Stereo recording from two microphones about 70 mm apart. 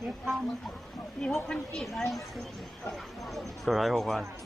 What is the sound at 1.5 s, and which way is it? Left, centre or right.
Speech, centre.